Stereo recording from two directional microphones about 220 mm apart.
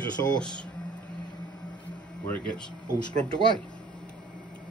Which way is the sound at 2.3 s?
5° left (ahead or behind).